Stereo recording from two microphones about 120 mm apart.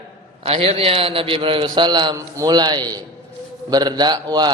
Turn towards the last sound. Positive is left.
turn(degrees=-35)  # may be behind; listen again after turning